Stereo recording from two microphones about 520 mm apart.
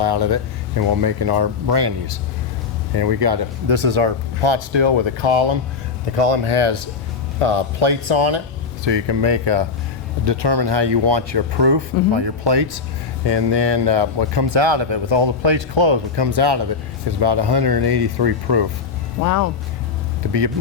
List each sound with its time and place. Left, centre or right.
0.0 s speech: right
6.1 s speech: right
19.2 s speech: left
20.2 s speech: right